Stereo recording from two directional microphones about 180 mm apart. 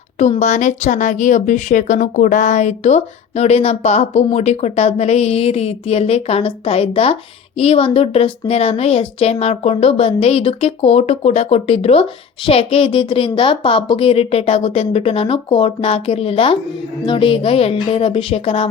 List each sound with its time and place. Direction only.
0.2 s a woman's voice: 40° left (ahead or behind)